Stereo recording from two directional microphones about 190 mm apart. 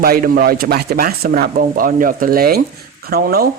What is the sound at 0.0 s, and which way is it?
Speech, 50° right (ahead or behind).